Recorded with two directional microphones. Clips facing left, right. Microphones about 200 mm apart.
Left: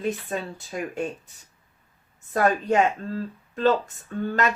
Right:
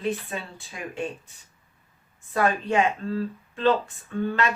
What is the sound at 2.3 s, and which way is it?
Speech, 40° left (ahead or behind).